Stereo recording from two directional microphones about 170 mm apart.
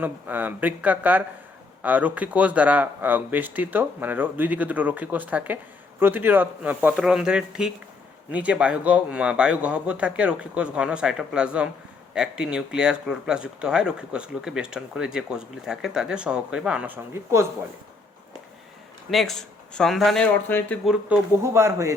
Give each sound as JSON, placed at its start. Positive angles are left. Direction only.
{"t": 0.0, "sound": "speech", "side_deg": -10}
{"t": 19.1, "sound": "speech", "side_deg": 0}
{"t": 20.8, "sound": "speech", "side_deg": -5}
{"t": 21.4, "sound": "speech", "side_deg": -15}